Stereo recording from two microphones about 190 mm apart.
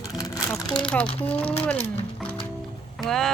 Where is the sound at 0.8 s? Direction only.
5° left (ahead or behind).